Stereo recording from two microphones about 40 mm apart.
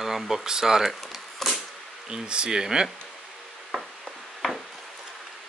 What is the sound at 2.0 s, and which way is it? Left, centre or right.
Speech, right.